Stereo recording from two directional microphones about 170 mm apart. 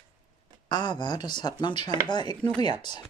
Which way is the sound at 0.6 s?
25° left (ahead or behind).